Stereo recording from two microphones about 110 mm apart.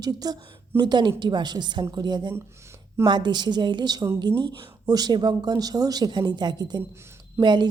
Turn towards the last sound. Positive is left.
turn(degrees=-45)  # may be behind; listen again after turning